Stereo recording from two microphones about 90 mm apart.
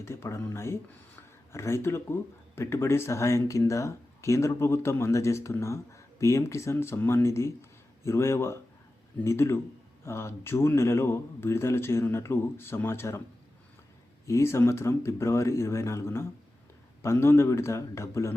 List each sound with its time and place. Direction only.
0.0 s a man's voice: 30° left (ahead or behind)
14.3 s a man's voice: 30° left (ahead or behind)